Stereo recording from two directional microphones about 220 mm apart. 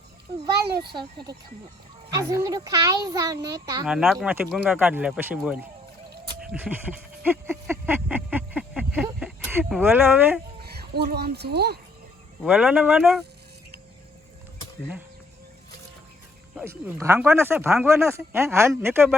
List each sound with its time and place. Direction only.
2.1 s speech: 15° right (ahead or behind)
3.8 s speech: 5° right (ahead or behind)
6.4 s a sound: 5° right (ahead or behind)
9.2 s speech: 5° right (ahead or behind)
10.6 s speech: 45° right (ahead or behind)
12.4 s speech: 5° right (ahead or behind)
16.6 s speech: 10° right (ahead or behind)